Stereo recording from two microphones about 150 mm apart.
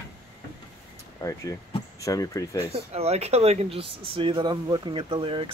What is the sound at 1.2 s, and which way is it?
Speech, 20° left (ahead or behind).